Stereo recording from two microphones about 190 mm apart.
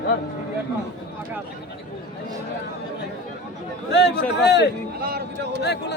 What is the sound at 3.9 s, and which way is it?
Speech, 65° left (ahead or behind).